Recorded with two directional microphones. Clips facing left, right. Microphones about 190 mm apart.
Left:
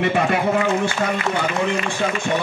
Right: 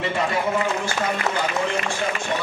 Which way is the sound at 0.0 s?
65° left (ahead or behind).